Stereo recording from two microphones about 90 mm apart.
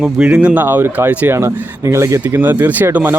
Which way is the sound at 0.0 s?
10° right (ahead or behind).